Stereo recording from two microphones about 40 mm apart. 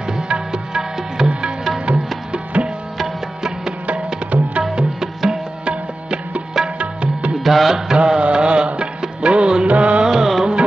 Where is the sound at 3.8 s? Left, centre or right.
Right.